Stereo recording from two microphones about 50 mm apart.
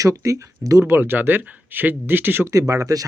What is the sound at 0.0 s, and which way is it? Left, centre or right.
Speech, right.